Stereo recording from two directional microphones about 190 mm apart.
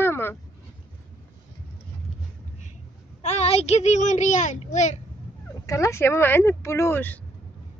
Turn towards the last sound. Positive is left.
turn(degrees=10)  # may be behind; listen again after turning